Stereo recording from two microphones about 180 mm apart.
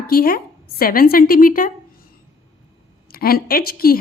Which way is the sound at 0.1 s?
55° left (ahead or behind).